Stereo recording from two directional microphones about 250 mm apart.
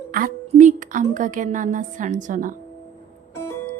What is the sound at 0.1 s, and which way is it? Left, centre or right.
Speech, right.